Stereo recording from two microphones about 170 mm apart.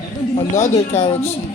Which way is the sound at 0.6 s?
15° left (ahead or behind).